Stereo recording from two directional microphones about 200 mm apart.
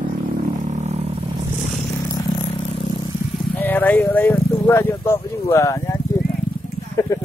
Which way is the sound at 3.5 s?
10° left (ahead or behind).